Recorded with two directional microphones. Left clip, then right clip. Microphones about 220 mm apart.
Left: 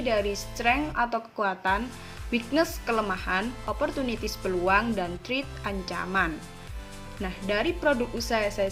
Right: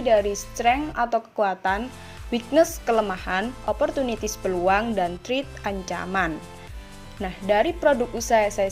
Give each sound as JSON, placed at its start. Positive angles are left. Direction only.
{"t": 0.0, "sound": "a woman's voice", "side_deg": -25}